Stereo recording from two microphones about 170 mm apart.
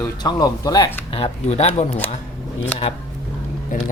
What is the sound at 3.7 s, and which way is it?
Speech, 55° left (ahead or behind).